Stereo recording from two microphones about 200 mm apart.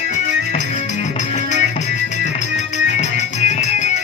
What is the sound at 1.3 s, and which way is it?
Music, 35° left (ahead or behind).